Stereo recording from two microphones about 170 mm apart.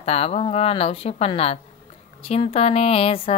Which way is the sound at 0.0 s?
35° left (ahead or behind).